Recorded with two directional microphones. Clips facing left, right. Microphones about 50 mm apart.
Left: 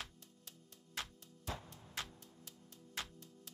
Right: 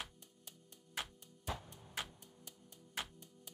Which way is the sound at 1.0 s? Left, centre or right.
Centre.